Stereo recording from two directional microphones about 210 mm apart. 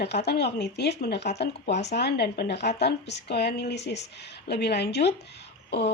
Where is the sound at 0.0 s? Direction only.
50° left (ahead or behind).